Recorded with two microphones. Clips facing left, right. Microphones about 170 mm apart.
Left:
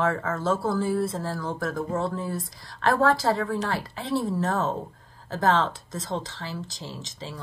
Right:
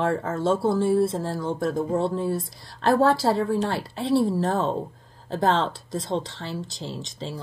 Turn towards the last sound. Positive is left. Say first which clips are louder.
# right 4 dB
turn(degrees=-30)  # may be behind; listen again after turning